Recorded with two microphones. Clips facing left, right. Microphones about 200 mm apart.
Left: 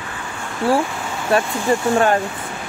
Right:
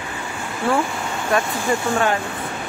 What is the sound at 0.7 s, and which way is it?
Speech, 35° left (ahead or behind).